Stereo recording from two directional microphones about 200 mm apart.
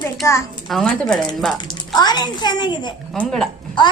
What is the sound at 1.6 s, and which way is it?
A child's voice, 20° left (ahead or behind).